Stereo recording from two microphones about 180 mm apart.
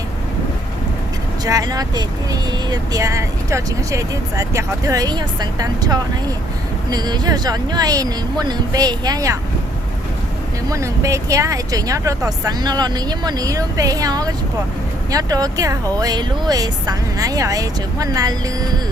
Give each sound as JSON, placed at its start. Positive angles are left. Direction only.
{"t": 1.5, "sound": "speech", "side_deg": -20}
{"t": 10.7, "sound": "speech", "side_deg": -15}